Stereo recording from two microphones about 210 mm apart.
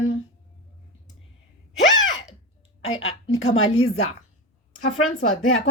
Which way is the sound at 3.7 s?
90° left.